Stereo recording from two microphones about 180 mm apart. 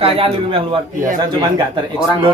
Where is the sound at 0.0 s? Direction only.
30° right (ahead or behind).